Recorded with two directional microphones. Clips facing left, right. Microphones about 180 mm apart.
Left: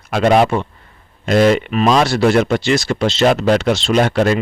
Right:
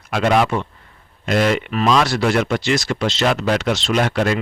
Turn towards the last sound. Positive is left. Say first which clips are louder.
# left 4 dB
turn(degrees=35)  # may be behind; listen again after turning